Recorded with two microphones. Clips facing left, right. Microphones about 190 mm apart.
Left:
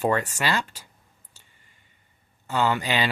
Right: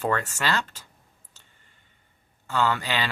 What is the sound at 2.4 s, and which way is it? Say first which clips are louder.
Speech: left 1 dB; 15° left (ahead or behind).